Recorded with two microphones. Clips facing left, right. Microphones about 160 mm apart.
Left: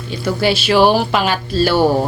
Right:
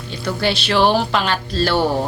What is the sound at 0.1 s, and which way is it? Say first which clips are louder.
Speech: left 4 dB; 10° left (ahead or behind).